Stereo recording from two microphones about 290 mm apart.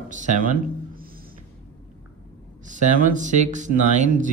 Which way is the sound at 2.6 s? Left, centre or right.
Right.